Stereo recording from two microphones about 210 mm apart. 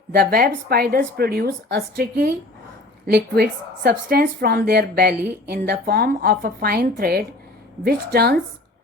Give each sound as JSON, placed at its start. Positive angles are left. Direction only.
{"t": 0.1, "sound": "speech", "side_deg": -45}